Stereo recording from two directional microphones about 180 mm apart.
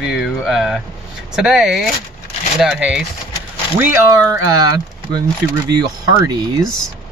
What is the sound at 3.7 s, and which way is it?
Speech, 20° right (ahead or behind).